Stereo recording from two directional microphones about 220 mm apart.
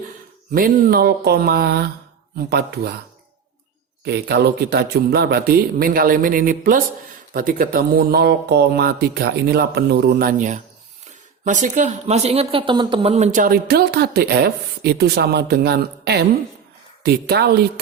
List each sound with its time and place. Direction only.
0.5 s speech: 40° right (ahead or behind)
4.0 s speech: 45° right (ahead or behind)